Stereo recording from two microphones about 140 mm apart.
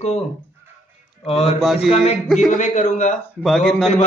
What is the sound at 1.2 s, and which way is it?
Speech, 45° left (ahead or behind).